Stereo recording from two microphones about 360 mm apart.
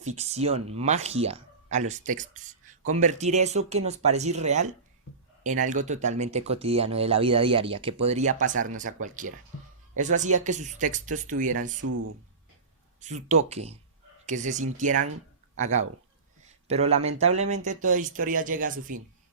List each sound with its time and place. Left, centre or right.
0.2 s speech: centre
11.8 s speech: right
13.0 s speech: centre